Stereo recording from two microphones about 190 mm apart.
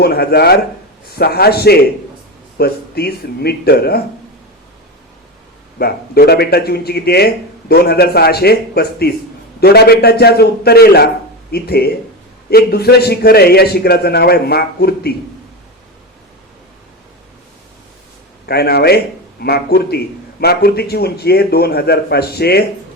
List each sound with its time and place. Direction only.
0.0 s speech: 55° left (ahead or behind)
5.8 s speech: 55° left (ahead or behind)
18.4 s speech: 55° left (ahead or behind)